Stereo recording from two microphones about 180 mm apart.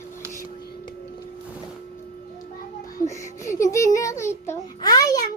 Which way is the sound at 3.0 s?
15° left (ahead or behind).